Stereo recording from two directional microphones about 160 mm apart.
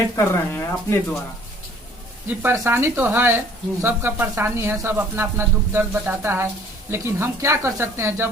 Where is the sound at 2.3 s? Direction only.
15° right (ahead or behind).